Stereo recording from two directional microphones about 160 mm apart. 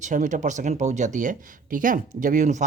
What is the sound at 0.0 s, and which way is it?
Speech, 50° right (ahead or behind).